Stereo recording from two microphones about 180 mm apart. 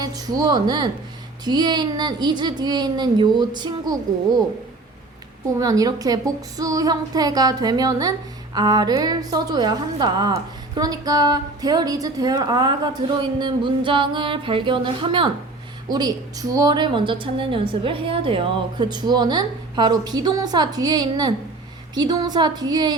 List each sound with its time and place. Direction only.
0.0 s a woman's voice: 20° right (ahead or behind)
5.5 s a woman's voice: 20° right (ahead or behind)